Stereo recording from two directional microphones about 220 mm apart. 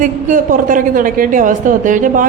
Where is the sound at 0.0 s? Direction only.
35° right (ahead or behind).